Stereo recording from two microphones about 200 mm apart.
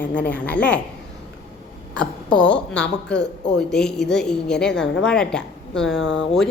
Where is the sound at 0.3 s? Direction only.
5° left (ahead or behind).